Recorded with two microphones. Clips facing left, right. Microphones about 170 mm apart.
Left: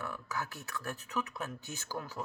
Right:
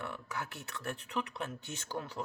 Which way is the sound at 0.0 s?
25° right (ahead or behind).